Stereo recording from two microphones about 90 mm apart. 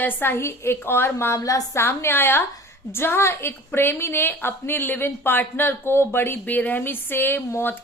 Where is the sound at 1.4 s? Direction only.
40° left (ahead or behind).